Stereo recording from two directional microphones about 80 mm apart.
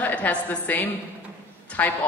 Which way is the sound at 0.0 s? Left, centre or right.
Centre.